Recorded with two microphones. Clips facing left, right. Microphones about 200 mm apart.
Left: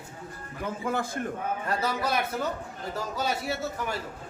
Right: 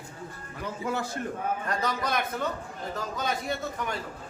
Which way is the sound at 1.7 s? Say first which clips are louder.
Left 3 dB; 5° left (ahead or behind).